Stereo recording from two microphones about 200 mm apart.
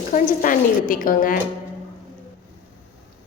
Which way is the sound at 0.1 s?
45° left (ahead or behind).